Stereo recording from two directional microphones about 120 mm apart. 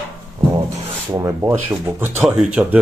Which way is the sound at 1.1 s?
25° right (ahead or behind).